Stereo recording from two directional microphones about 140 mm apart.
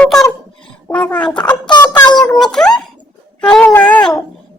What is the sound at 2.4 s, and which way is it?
A woman's voice, 5° left (ahead or behind).